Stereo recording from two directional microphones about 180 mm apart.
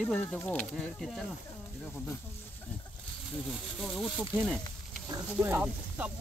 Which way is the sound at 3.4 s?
Centre (ahead or behind).